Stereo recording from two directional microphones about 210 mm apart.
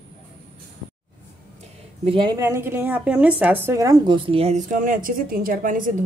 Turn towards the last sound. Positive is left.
turn(degrees=-40)  # may be behind; listen again after turning